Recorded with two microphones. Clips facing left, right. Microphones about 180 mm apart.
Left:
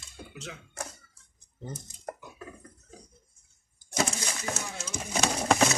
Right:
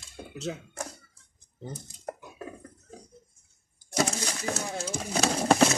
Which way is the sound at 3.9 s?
35° right (ahead or behind).